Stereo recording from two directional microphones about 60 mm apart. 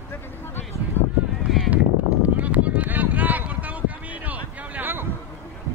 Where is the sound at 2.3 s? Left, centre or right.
Right.